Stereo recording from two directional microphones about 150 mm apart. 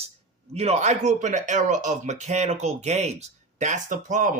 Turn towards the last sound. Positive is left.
turn(degrees=-60)  # may be behind; listen again after turning